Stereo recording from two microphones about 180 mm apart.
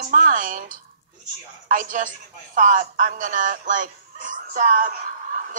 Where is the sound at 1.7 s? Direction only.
50° right (ahead or behind).